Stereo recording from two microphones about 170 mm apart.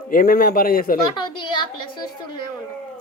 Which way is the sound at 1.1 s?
25° left (ahead or behind).